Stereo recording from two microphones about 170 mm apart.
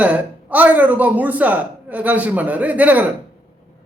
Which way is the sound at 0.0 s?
10° right (ahead or behind).